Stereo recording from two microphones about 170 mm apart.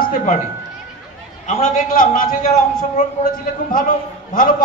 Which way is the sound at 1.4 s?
50° left (ahead or behind).